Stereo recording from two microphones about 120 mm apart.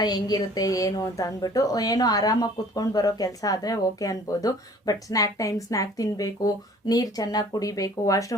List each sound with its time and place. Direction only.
0.0 s a woman's voice: 35° left (ahead or behind)